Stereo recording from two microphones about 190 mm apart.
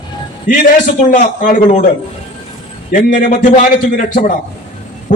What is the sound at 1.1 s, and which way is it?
Speech, 45° left (ahead or behind).